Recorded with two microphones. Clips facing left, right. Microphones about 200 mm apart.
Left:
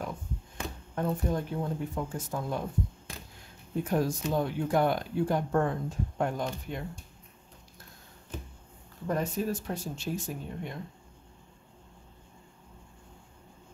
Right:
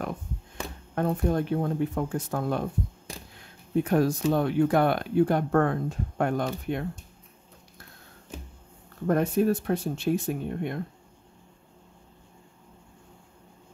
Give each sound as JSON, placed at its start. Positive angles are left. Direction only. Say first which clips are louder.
{"t": 0.9, "sound": "speech", "louder": "right 5 dB", "side_deg": -65}
{"t": 3.8, "sound": "speech", "louder": "right 5 dB", "side_deg": -65}
{"t": 9.0, "sound": "speech", "louder": "right 7 dB", "side_deg": -60}